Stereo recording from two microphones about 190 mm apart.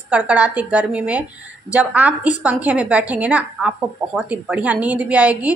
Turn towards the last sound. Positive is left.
turn(degrees=-10)  # may be behind; listen again after turning